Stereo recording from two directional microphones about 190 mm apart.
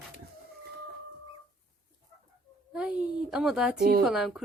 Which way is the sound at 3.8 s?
50° right (ahead or behind).